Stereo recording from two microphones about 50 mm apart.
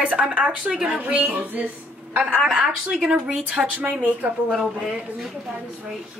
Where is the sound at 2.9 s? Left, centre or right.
Centre.